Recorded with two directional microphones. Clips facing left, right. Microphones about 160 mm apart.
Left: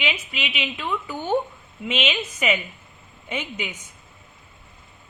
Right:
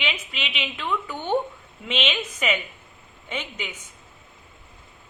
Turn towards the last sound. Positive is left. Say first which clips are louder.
# left 3 dB
turn(degrees=10)  # may be behind; listen again after turning